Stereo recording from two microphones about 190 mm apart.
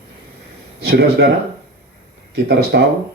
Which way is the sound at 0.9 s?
60° right (ahead or behind).